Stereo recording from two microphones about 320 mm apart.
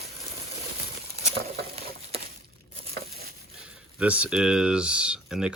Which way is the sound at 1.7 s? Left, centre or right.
Centre.